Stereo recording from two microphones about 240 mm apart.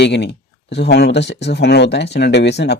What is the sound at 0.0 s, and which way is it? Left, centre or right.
Speech, left.